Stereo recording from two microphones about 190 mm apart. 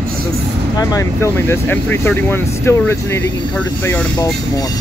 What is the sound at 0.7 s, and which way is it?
Speech, 15° left (ahead or behind).